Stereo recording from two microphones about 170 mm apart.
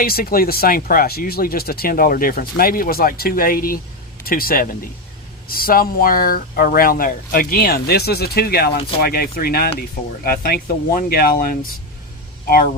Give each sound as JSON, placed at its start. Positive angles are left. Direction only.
{"t": 0.0, "sound": "speech", "side_deg": 60}